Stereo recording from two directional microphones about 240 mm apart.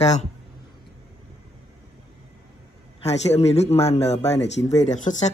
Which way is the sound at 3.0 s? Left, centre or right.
Left.